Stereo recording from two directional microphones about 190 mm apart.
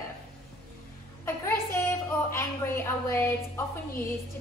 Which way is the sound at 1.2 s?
15° left (ahead or behind).